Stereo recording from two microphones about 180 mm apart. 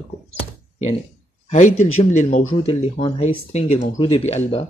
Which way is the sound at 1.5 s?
45° left (ahead or behind).